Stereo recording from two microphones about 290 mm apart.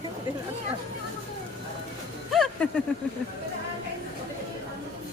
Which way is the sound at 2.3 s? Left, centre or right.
Centre.